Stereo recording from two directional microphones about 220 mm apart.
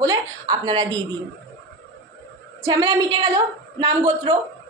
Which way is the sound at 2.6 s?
20° right (ahead or behind).